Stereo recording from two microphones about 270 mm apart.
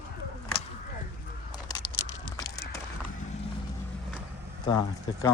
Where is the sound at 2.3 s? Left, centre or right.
Centre.